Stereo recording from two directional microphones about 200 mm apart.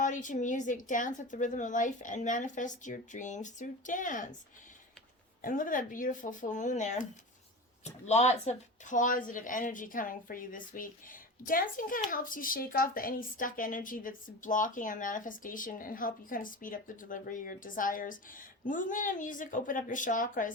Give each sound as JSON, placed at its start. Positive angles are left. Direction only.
{"t": 0.0, "sound": "a woman's voice", "side_deg": 40}
{"t": 5.4, "sound": "a woman's voice", "side_deg": 40}